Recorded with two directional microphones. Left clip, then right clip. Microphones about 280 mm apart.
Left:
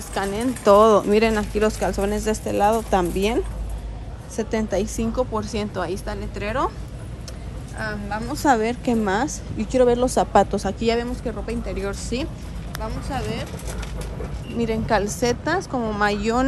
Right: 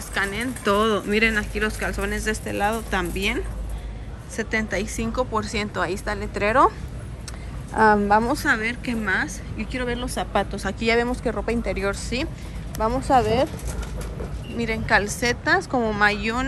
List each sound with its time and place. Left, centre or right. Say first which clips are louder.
0.1 s a woman's voice: left 1 dB; centre
8.1 s speech: right 10 dB; centre
8.4 s a woman's voice: left 3 dB; centre
12.7 s speech: right 10 dB; centre
14.6 s a woman's voice: even; centre